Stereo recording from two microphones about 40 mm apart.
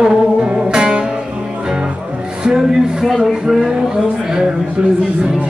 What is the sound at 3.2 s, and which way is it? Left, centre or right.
Speech, centre.